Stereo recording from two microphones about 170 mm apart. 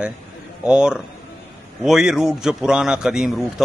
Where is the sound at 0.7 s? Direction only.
5° right (ahead or behind).